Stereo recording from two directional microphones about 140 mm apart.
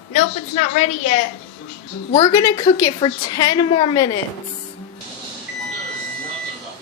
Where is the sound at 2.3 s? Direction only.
20° left (ahead or behind); by 3.9 s 40° left (ahead or behind).